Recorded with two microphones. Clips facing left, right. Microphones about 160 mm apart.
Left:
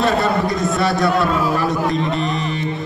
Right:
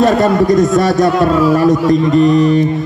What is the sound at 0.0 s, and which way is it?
A man's voice, 45° right (ahead or behind).